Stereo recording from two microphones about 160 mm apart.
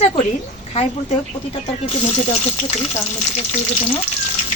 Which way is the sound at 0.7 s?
40° left (ahead or behind).